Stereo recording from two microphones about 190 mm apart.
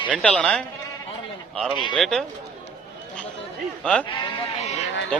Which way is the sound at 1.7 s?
25° left (ahead or behind).